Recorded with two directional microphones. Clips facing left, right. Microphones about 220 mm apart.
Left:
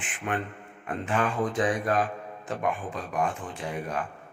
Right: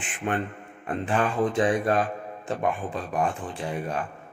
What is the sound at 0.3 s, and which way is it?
Speech, 30° right (ahead or behind).